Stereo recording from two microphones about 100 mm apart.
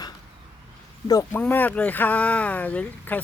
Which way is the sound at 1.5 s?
15° left (ahead or behind).